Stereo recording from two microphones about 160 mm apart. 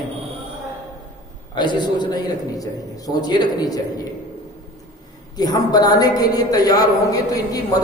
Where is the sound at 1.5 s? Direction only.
25° left (ahead or behind).